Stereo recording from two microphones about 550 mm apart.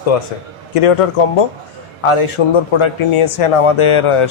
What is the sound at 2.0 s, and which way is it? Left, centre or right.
A man's voice, left.